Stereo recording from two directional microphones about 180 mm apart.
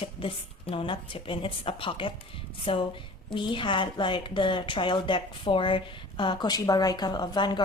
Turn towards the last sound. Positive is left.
turn(degrees=25)  # may be behind; listen again after turning